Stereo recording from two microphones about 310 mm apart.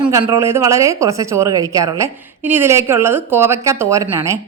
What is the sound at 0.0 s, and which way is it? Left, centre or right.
A woman's voice, centre.